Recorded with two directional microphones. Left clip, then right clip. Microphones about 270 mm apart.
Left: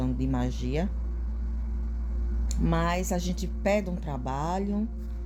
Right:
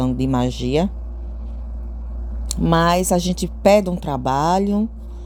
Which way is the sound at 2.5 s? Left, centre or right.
Right.